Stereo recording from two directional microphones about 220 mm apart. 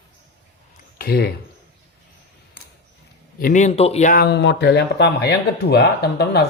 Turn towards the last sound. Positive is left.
turn(degrees=45)  # may be behind; listen again after turning